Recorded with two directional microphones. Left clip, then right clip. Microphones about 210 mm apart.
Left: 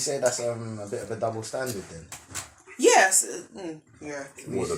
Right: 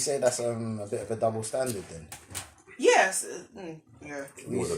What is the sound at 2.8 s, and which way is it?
Music, 50° left (ahead or behind).